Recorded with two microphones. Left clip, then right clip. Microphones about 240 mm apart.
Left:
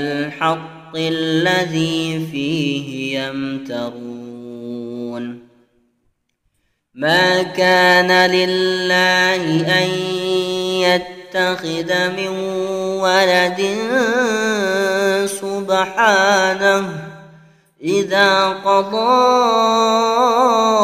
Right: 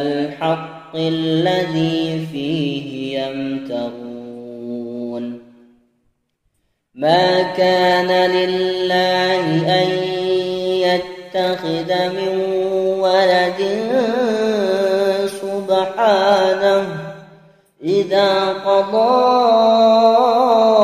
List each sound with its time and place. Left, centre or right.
0.1 s mantra: left
7.0 s mantra: left
17.8 s mantra: left
19.0 s a sound: left